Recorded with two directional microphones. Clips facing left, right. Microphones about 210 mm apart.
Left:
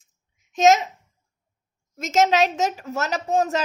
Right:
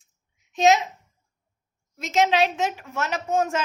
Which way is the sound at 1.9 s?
45° left (ahead or behind).